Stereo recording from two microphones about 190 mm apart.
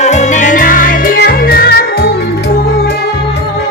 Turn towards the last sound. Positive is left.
turn(degrees=55)  # may be behind; listen again after turning